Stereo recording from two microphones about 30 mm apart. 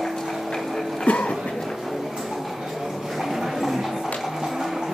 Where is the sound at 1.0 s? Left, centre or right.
Left.